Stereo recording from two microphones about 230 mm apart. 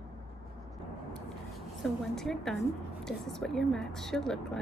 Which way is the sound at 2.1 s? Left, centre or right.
Centre.